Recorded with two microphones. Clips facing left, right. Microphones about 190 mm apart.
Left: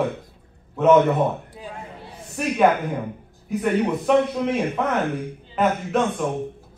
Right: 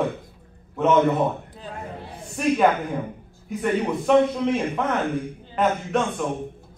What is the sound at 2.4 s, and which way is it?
Speech, centre (ahead or behind).